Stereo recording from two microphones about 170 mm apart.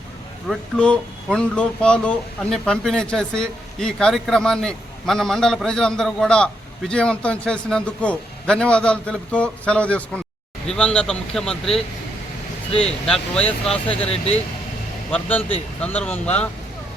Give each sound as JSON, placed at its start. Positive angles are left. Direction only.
{"t": 0.4, "sound": "speech", "side_deg": 5}
{"t": 14.0, "sound": "speech", "side_deg": 35}
{"t": 15.1, "sound": "speech", "side_deg": 10}